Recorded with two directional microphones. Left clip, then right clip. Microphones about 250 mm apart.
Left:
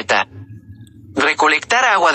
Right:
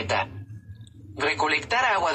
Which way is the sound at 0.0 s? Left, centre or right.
Left.